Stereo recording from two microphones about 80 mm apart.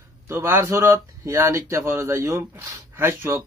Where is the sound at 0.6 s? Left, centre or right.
Right.